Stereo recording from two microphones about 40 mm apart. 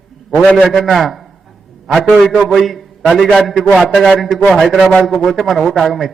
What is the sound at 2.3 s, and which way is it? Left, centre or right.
A man's voice, centre.